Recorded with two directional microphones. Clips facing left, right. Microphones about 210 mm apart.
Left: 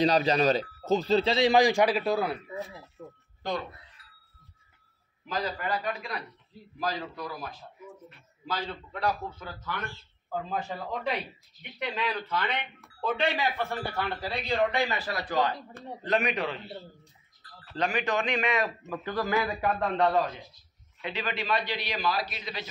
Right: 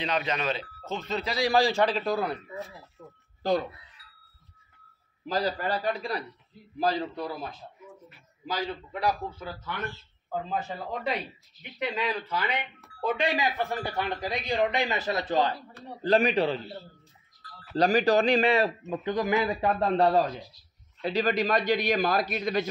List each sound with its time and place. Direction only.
0.0 s speech: 35° left (ahead or behind); by 2.3 s 5° left (ahead or behind)
5.2 s a man's voice: 35° right (ahead or behind)
8.1 s speech: 10° right (ahead or behind)
11.8 s a man's voice: 10° right (ahead or behind); by 16.6 s 30° right (ahead or behind)
17.7 s a man's voice: 35° right (ahead or behind)
18.9 s a man's voice: 20° right (ahead or behind)
19.9 s a man's voice: 35° right (ahead or behind)